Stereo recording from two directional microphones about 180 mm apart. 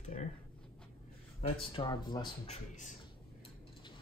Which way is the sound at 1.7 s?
25° left (ahead or behind).